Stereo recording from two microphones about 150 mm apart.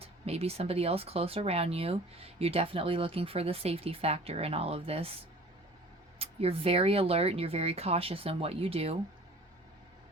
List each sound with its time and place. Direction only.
0.0 s speech: 45° right (ahead or behind)
6.1 s speech: 40° right (ahead or behind)